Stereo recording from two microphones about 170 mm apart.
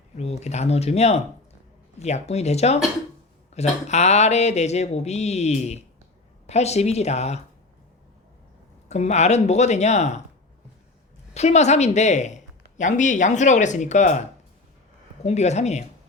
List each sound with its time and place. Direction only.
0.2 s speech: 40° left (ahead or behind)
8.9 s speech: 40° left (ahead or behind)
11.3 s speech: 40° left (ahead or behind)